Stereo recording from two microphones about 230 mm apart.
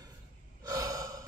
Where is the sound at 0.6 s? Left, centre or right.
Centre.